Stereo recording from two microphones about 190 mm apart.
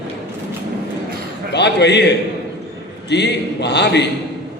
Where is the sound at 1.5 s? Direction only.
65° left (ahead or behind).